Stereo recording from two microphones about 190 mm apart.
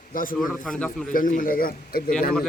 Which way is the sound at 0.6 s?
5° left (ahead or behind).